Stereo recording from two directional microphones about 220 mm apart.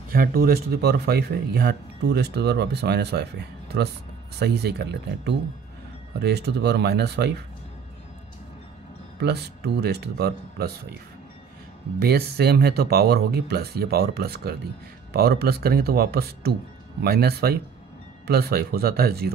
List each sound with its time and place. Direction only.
0.1 s speech: 40° right (ahead or behind)
9.2 s speech: 50° right (ahead or behind)
12.0 s speech: 45° right (ahead or behind)